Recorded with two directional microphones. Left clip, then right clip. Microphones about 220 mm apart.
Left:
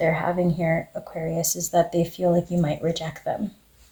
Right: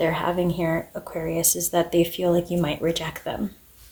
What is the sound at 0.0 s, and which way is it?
Speech, 30° right (ahead or behind).